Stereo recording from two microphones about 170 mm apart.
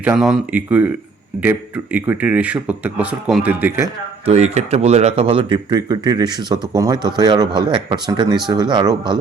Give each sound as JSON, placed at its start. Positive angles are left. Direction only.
{"t": 0.0, "sound": "speech", "side_deg": -5}
{"t": 4.3, "sound": "speech", "side_deg": -40}